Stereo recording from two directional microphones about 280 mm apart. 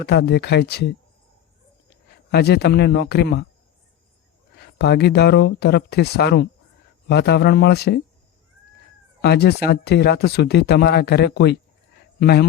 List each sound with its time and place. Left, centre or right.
0.0 s speech: left
2.3 s speech: left
4.5 s speech: left
9.2 s speech: left